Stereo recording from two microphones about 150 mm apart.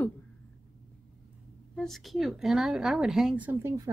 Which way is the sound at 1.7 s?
Centre (ahead or behind).